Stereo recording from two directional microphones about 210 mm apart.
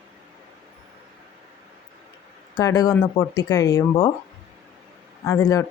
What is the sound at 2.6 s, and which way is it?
Speech, 15° left (ahead or behind).